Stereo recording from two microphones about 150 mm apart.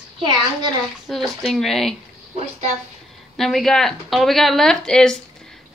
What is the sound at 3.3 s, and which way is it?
Speech, centre (ahead or behind).